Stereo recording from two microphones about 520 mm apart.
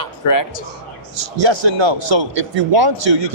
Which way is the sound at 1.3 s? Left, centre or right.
Right.